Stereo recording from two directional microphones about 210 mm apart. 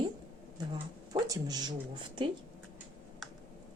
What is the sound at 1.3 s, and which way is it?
Speech, 20° right (ahead or behind).